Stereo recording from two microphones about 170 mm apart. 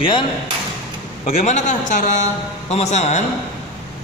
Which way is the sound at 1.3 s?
40° left (ahead or behind).